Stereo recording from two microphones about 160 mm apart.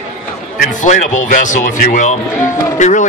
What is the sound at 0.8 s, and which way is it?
Speech, 50° left (ahead or behind).